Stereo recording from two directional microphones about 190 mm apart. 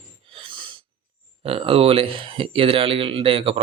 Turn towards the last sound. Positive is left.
turn(degrees=-30)  # may be behind; listen again after turning